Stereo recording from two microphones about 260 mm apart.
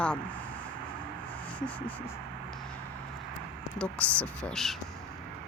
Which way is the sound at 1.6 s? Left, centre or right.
Centre.